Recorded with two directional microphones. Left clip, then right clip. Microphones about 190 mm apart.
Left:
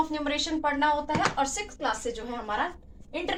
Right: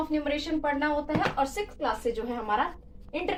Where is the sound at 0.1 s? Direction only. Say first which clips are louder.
Even; 20° right (ahead or behind).